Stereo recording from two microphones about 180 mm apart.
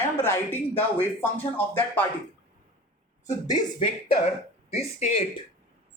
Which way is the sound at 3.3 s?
20° left (ahead or behind).